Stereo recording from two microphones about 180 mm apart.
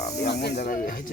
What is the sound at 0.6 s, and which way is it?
Speech, 50° left (ahead or behind).